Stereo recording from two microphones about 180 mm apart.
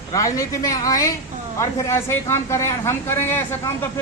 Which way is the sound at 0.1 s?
20° left (ahead or behind).